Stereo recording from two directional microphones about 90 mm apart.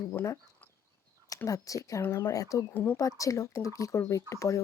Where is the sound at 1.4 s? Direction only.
40° left (ahead or behind).